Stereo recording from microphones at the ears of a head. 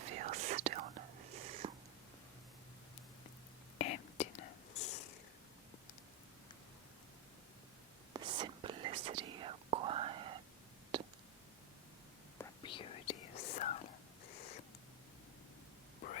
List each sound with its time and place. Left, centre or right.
0.0 s whispering: right
3.8 s whispering: left
8.1 s whispering: right
12.6 s whispering: left